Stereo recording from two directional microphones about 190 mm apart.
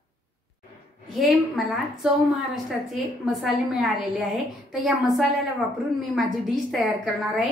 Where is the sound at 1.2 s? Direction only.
Centre (ahead or behind).